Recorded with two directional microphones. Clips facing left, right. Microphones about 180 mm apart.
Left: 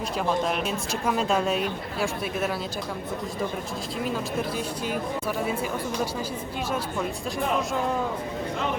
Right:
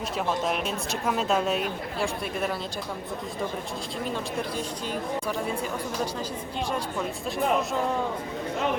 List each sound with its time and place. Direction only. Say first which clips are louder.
0.2 s a woman's voice: left 2 dB; centre (ahead or behind)
4.0 s speech: left 3 dB; 5° left (ahead or behind)